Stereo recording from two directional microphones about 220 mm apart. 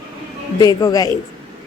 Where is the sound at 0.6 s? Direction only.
15° left (ahead or behind).